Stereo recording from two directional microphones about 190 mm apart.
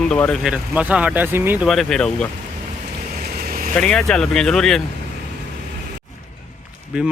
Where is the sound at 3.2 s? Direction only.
50° right (ahead or behind).